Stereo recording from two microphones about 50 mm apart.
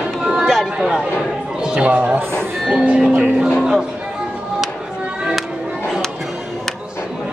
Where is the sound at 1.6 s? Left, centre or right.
Centre.